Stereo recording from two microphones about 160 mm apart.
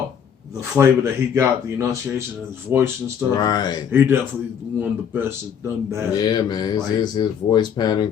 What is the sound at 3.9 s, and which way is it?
Speech, 15° right (ahead or behind).